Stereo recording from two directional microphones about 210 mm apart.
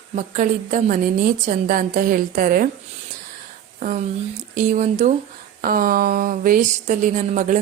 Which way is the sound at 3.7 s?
35° right (ahead or behind).